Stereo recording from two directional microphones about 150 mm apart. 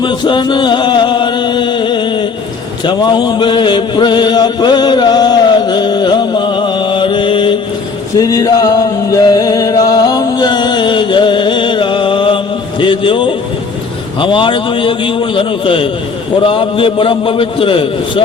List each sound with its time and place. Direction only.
0.0 s music: 30° left (ahead or behind)
2.8 s chant: 30° left (ahead or behind)
8.2 s a sound: 25° left (ahead or behind)
9.1 s music: 25° left (ahead or behind)
12.8 s a sound: 35° left (ahead or behind)
14.2 s a man's voice: 35° left (ahead or behind)